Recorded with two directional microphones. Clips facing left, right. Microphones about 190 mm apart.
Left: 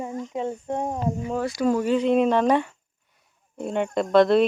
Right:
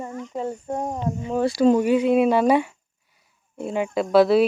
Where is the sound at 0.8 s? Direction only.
5° left (ahead or behind).